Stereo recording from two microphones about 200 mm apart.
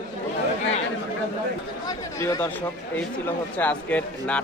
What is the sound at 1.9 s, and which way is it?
Speech, 15° left (ahead or behind).